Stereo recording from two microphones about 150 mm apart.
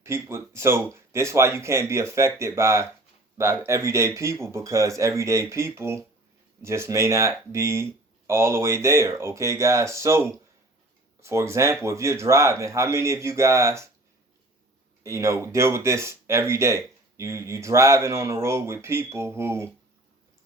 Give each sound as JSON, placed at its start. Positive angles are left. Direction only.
{"t": 0.0, "sound": "speech", "side_deg": -15}
{"t": 15.0, "sound": "speech", "side_deg": -20}